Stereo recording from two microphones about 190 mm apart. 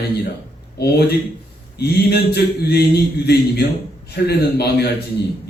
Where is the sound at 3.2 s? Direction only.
55° left (ahead or behind).